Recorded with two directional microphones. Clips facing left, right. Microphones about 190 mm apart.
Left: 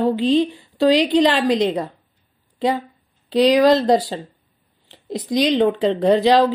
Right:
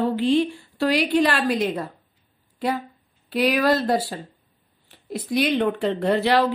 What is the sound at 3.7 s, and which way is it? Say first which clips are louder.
Speech: left 6 dB; 20° left (ahead or behind).